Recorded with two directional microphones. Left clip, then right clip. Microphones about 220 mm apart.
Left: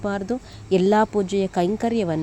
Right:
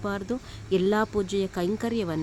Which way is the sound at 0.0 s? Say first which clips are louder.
Left 5 dB; 15° left (ahead or behind).